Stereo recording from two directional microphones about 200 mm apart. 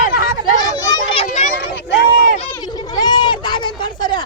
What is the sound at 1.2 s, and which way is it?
Speech, 35° left (ahead or behind).